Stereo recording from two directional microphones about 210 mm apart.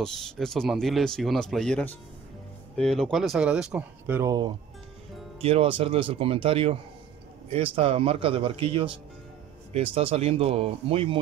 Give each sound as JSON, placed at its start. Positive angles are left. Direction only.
{"t": 0.0, "sound": "speech", "side_deg": 0}
{"t": 5.4, "sound": "speech", "side_deg": -25}